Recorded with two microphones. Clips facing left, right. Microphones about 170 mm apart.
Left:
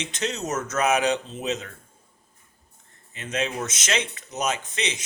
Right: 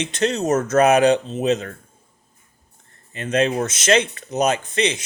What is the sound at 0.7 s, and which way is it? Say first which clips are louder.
Speech: right 8 dB; 55° right (ahead or behind).